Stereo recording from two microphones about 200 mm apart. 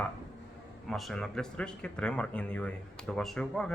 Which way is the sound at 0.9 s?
Centre (ahead or behind).